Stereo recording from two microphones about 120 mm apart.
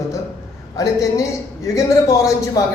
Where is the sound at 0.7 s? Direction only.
25° left (ahead or behind).